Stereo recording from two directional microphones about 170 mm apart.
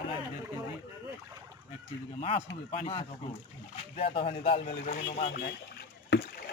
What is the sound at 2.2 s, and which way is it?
Speech, 35° left (ahead or behind).